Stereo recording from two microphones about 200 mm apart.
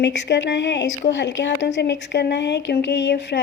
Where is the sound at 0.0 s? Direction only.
60° left (ahead or behind).